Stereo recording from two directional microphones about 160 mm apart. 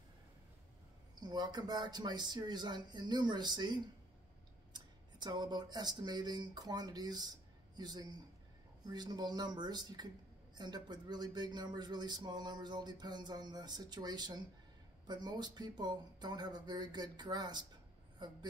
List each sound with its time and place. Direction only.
1.2 s a man's voice: 25° right (ahead or behind)